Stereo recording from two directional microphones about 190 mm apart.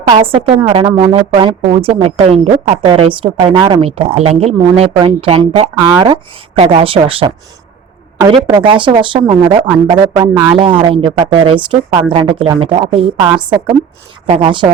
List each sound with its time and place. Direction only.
0.3 s speech: 30° right (ahead or behind)
8.7 s speech: 25° right (ahead or behind)
14.3 s speech: 30° right (ahead or behind)